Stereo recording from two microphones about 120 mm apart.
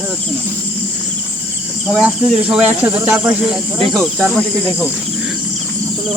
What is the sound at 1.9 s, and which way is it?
Cricket, 5° right (ahead or behind).